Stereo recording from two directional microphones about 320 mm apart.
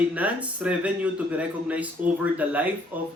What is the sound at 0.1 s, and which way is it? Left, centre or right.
Speech, centre.